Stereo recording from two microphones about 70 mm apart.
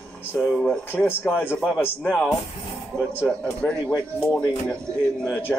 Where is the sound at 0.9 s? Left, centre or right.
Left.